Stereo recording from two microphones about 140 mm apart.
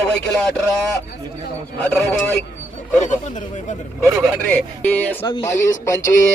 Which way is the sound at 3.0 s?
60° left (ahead or behind).